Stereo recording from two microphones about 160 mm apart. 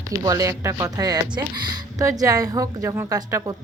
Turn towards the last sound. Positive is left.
turn(degrees=-20)  # may be behind; listen again after turning